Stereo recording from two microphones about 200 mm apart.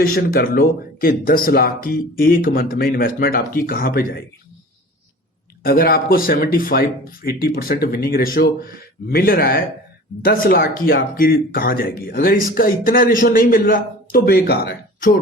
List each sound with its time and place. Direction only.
0.0 s speech: 45° left (ahead or behind)
5.6 s speech: 50° left (ahead or behind)